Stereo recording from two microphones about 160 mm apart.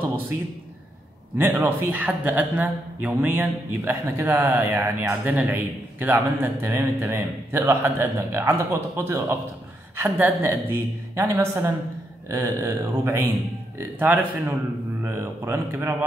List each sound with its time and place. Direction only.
1.6 s a man's voice: 10° right (ahead or behind)